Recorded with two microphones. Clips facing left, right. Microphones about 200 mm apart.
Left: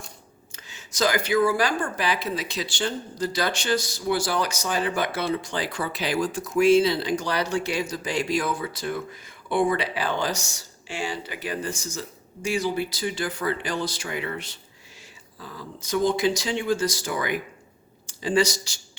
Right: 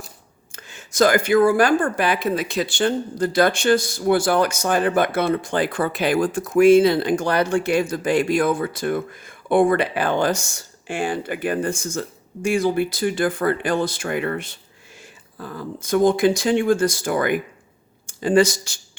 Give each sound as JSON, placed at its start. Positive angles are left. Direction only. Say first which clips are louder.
{"t": 0.5, "sound": "speech", "louder": "right 10 dB", "side_deg": -50}